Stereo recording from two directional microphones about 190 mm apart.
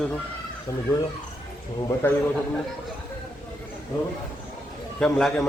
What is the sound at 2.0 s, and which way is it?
Speech, 10° left (ahead or behind).